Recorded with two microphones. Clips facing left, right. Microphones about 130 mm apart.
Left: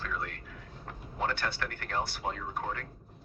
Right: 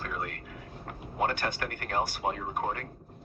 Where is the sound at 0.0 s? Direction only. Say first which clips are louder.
Right 1 dB; 50° right (ahead or behind).